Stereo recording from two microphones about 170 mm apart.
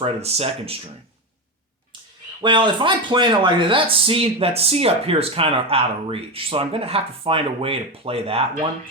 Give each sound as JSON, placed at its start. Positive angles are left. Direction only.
{"t": 0.0, "sound": "speech", "side_deg": -35}
{"t": 2.4, "sound": "speech", "side_deg": -30}